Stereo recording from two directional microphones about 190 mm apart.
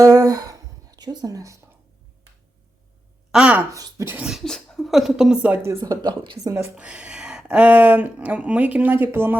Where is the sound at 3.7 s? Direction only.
15° right (ahead or behind).